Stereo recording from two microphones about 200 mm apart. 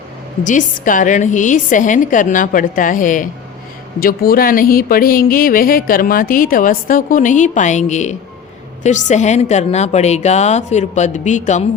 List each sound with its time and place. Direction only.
0.4 s a woman's voice: 40° left (ahead or behind)